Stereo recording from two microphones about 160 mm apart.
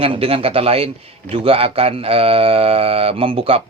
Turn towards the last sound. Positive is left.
turn(degrees=-35)  # may be behind; listen again after turning